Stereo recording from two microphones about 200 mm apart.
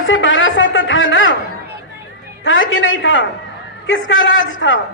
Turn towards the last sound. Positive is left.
turn(degrees=70)  # may be behind; listen again after turning